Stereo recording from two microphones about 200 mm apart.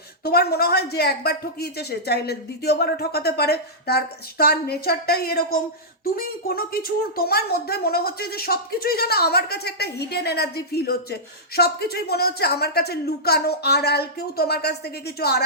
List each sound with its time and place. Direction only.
0.3 s a woman's voice: 50° left (ahead or behind)